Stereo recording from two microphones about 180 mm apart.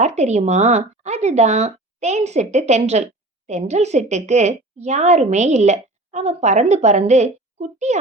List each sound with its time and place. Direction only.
0.0 s a woman's voice: 40° right (ahead or behind)